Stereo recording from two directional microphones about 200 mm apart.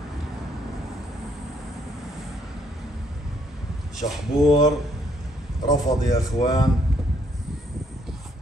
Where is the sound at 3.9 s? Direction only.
Centre (ahead or behind).